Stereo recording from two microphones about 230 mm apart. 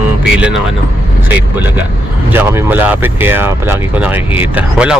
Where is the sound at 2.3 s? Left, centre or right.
Centre.